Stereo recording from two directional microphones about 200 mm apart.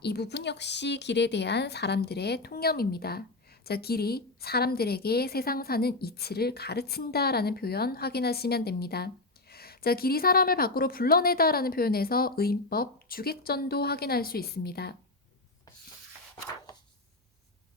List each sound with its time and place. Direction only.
0.0 s speech: 55° left (ahead or behind)